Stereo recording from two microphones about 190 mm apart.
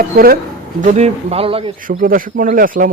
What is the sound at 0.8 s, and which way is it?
Speech, 40° right (ahead or behind).